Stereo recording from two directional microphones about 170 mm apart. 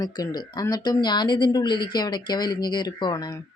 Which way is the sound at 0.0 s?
25° left (ahead or behind).